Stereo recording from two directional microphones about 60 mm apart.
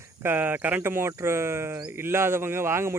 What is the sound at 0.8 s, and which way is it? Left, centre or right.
Speech, right.